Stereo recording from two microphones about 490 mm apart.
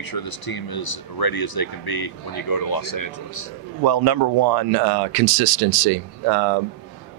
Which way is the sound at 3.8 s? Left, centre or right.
Right.